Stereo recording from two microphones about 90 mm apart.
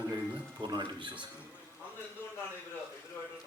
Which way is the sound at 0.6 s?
60° right (ahead or behind).